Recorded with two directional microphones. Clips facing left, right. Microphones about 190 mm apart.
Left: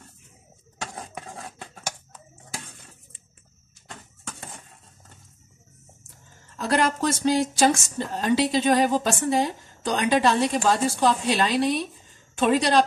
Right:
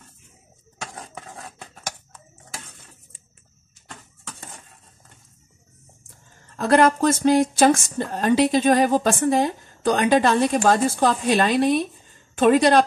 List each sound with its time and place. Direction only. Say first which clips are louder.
6.5 s speech: right 6 dB; 55° right (ahead or behind)